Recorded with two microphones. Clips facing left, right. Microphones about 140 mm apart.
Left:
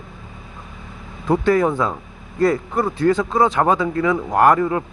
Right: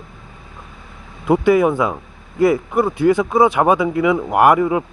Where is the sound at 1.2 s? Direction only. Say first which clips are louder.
Right 3 dB; 10° right (ahead or behind).